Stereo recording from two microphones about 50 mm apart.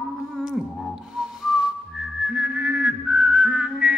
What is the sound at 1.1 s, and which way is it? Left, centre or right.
Whistling, centre.